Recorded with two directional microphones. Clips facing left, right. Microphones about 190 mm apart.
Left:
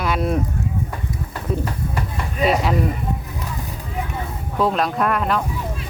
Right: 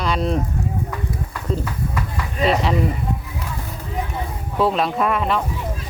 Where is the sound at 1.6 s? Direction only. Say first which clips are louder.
Even; 30° left (ahead or behind).